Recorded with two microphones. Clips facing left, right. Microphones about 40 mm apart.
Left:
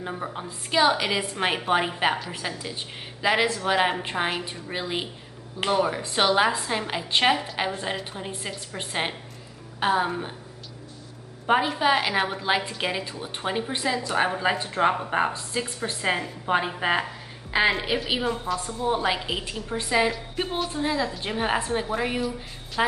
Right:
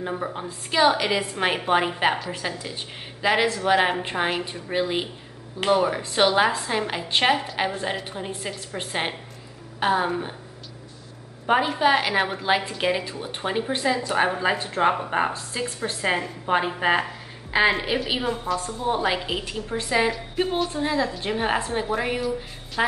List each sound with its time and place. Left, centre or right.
0.0 s a woman's voice: centre
11.4 s a woman's voice: centre